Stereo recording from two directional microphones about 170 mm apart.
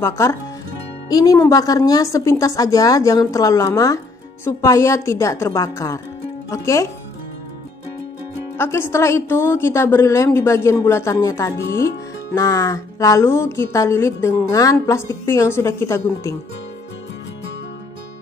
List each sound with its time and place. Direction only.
0.0 s a woman's voice: 15° left (ahead or behind)
8.5 s a woman's voice: 15° left (ahead or behind)